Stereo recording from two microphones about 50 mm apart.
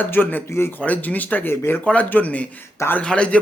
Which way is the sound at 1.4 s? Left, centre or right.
Left.